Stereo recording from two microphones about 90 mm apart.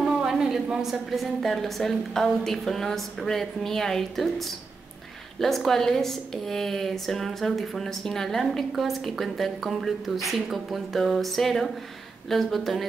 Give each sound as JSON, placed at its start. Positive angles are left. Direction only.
{"t": 0.0, "sound": "speech", "side_deg": -5}